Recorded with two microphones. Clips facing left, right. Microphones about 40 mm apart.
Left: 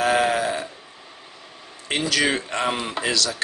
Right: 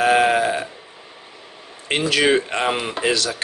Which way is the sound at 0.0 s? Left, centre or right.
Right.